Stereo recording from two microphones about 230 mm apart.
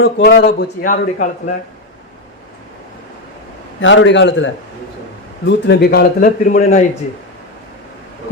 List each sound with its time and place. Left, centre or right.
0.0 s speech: left
3.8 s a man's voice: left